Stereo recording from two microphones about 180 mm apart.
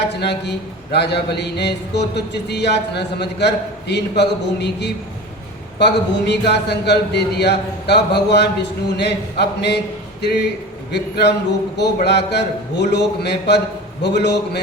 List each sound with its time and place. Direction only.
0.1 s mantra: 70° left (ahead or behind)